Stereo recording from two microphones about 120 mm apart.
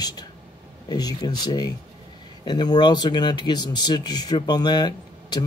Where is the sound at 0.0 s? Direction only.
35° left (ahead or behind).